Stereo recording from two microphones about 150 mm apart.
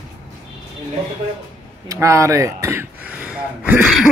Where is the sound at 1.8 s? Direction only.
20° right (ahead or behind).